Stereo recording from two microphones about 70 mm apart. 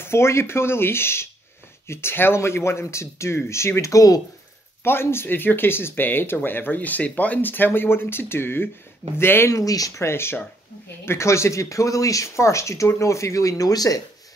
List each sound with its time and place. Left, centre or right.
0.0 s speech: left
4.8 s speech: left
9.5 s speech: left
10.0 s speech: left